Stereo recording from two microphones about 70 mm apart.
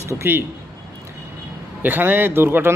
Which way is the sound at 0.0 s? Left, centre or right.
Right.